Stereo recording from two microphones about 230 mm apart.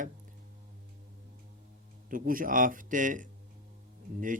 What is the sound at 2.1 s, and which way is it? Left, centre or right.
A man's voice, right.